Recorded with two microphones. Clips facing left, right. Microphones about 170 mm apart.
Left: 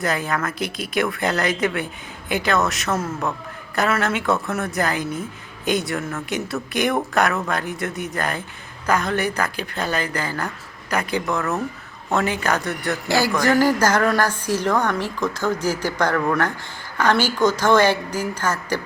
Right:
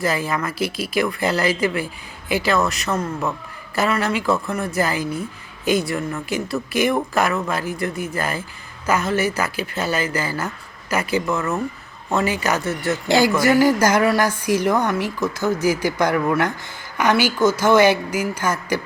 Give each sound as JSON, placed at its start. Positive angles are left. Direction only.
{"t": 0.0, "sound": "speech", "side_deg": 0}
{"t": 13.1, "sound": "a man's voice", "side_deg": -20}
{"t": 13.3, "sound": "speech", "side_deg": -10}